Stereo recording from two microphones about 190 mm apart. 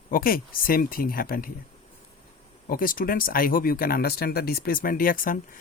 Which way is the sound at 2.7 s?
50° left (ahead or behind).